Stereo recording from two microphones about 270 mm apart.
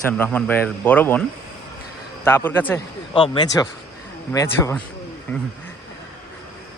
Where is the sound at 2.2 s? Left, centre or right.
Centre.